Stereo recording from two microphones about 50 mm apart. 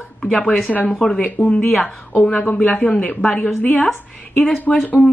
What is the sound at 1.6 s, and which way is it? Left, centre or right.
Speech, left.